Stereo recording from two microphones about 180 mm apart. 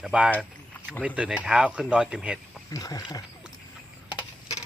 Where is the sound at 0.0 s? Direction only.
5° right (ahead or behind).